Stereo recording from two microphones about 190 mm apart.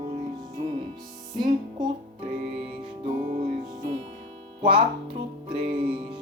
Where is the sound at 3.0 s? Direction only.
45° right (ahead or behind).